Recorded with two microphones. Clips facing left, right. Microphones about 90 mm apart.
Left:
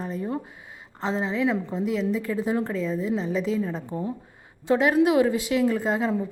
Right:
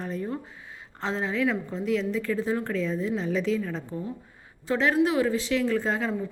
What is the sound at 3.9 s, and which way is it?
Speech, 30° left (ahead or behind).